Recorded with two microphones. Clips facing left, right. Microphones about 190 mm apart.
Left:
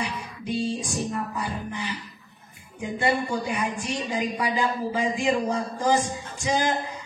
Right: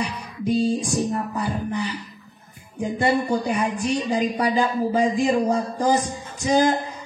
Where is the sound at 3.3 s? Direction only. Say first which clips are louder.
Right 5 dB; 35° right (ahead or behind).